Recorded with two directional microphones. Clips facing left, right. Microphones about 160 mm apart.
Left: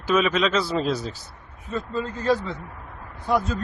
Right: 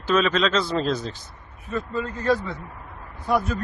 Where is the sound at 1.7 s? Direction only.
25° left (ahead or behind).